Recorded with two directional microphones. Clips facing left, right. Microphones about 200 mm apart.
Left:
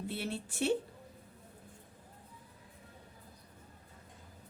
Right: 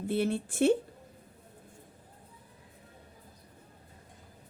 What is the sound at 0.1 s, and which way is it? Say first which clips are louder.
Speech: right 9 dB; 50° right (ahead or behind).